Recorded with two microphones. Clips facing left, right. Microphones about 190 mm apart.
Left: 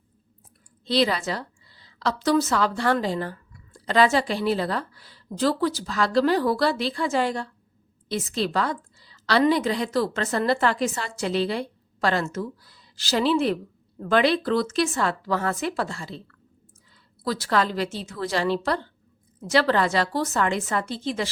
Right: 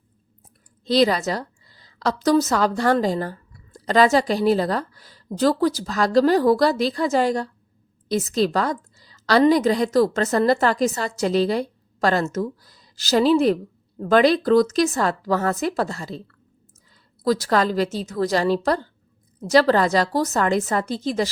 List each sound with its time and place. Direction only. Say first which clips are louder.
0.9 s a woman's voice: right 4 dB; 40° right (ahead or behind)